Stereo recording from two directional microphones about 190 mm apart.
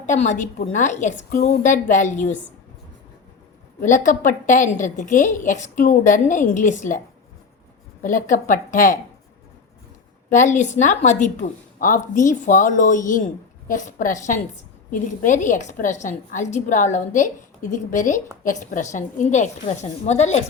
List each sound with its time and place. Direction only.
0.0 s a woman's voice: 40° left (ahead or behind)
3.8 s a woman's voice: 40° left (ahead or behind)
8.0 s a woman's voice: 45° left (ahead or behind)
10.2 s a woman's voice: 40° left (ahead or behind)